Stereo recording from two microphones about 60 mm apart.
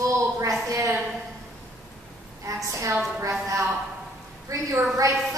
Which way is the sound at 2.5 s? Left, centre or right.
Right.